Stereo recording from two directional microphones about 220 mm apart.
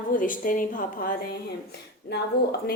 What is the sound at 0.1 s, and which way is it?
A woman's voice, 40° left (ahead or behind).